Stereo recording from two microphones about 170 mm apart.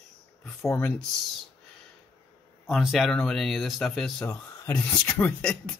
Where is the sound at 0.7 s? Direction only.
10° left (ahead or behind).